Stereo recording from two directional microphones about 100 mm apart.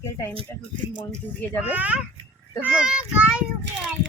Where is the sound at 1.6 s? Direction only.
15° right (ahead or behind).